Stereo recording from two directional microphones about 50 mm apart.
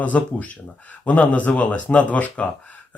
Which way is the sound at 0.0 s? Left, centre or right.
Left.